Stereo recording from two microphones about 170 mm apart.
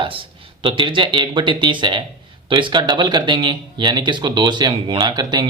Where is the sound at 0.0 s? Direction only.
30° right (ahead or behind).